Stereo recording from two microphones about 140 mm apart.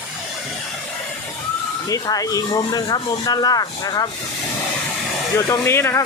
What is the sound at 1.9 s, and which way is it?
Speech, 25° left (ahead or behind).